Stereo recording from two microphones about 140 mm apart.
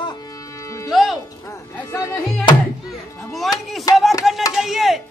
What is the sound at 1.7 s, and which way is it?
Speech, 20° left (ahead or behind).